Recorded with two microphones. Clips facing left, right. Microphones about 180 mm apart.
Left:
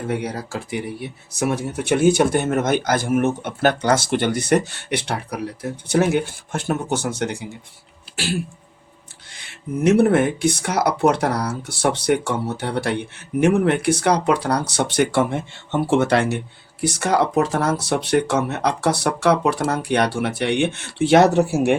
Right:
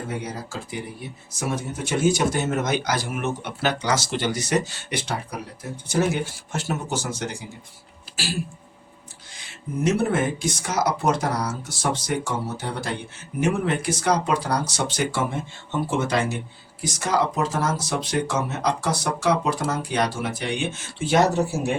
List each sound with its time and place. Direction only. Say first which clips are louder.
0.1 s speech: left 6 dB; 65° left (ahead or behind)